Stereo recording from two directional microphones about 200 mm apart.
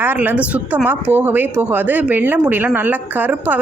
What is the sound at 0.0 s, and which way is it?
A woman's voice, 10° right (ahead or behind).